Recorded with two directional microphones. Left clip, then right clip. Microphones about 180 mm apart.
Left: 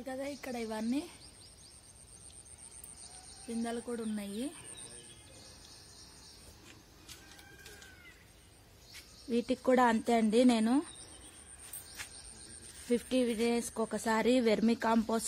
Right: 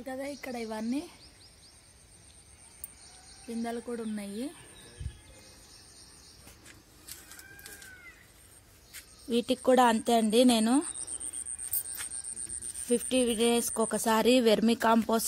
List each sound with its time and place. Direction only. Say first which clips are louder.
0.0 s speech: right 2 dB; 25° right (ahead or behind)
3.4 s speech: right 2 dB; 25° right (ahead or behind)
9.3 s a woman's voice: right 4 dB; 5° right (ahead or behind)
12.7 s speech: right 4 dB; centre (ahead or behind)